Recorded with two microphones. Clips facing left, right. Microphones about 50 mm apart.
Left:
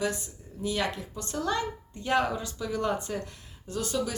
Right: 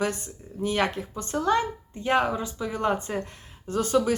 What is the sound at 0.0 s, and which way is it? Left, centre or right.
Speech, right.